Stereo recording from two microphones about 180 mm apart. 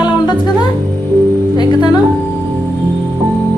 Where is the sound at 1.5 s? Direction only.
25° left (ahead or behind).